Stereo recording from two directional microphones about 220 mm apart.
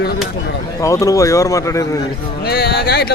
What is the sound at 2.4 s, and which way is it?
Speech, 45° left (ahead or behind).